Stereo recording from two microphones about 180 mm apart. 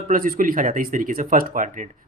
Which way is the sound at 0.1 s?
50° right (ahead or behind).